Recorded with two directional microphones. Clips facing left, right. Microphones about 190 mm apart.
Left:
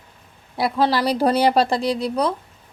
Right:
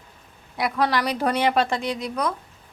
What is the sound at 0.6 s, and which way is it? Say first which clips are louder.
Speech: left 3 dB; 30° left (ahead or behind).